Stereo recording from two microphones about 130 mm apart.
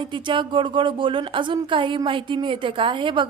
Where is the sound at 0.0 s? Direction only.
40° right (ahead or behind).